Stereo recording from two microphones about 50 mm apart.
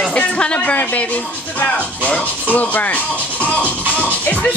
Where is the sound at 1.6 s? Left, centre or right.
Left.